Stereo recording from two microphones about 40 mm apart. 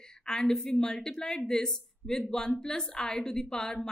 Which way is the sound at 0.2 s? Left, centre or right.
Centre.